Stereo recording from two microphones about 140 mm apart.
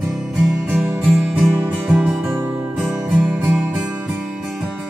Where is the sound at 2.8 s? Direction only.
5° right (ahead or behind).